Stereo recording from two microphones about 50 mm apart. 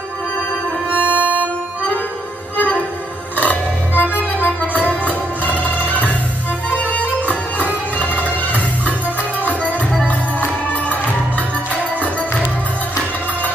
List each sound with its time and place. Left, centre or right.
0.8 s music: right
3.3 s music: left